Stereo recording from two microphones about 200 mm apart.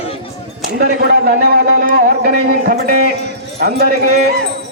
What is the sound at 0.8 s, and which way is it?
A man's voice, 50° right (ahead or behind).